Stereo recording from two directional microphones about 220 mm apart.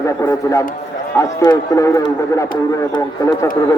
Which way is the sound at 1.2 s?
15° left (ahead or behind).